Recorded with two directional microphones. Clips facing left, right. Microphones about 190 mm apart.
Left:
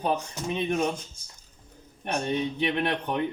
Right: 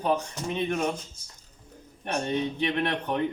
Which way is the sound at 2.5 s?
15° left (ahead or behind).